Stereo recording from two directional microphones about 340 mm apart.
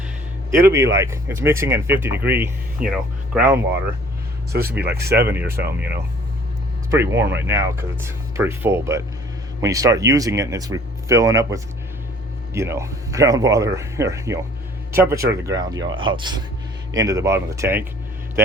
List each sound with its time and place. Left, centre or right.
0.5 s speech: centre
4.8 s speech: right
5.2 s speech: centre